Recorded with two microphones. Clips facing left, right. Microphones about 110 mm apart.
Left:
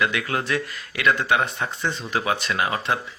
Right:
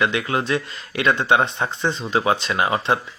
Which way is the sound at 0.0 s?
25° right (ahead or behind).